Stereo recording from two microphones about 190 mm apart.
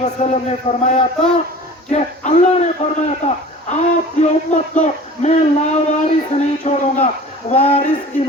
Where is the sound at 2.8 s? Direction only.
40° left (ahead or behind).